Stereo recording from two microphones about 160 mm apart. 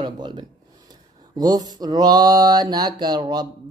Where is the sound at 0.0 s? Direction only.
25° right (ahead or behind).